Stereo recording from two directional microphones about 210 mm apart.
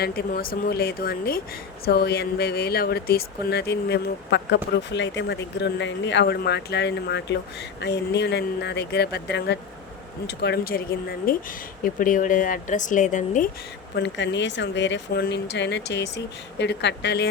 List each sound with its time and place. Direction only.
0.0 s speech: 45° left (ahead or behind)
13.9 s speech: 55° left (ahead or behind)